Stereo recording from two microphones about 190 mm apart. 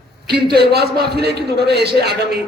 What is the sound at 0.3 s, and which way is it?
A man's voice, 60° right (ahead or behind).